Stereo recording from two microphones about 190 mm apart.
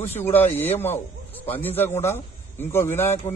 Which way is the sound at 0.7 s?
10° left (ahead or behind).